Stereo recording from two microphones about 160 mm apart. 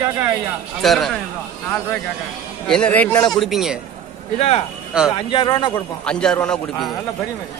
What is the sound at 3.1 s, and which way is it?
Speech, 25° left (ahead or behind).